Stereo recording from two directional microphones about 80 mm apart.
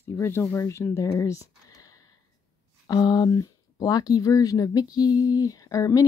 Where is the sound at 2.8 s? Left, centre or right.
Left.